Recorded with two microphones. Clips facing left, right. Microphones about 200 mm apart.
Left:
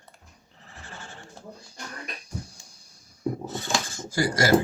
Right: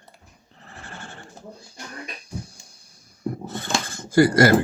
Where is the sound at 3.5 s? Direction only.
55° right (ahead or behind).